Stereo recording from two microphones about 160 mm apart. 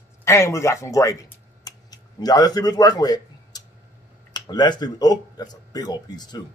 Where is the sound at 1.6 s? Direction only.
25° left (ahead or behind).